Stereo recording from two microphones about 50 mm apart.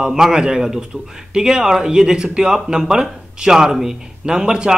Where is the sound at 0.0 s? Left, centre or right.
Centre.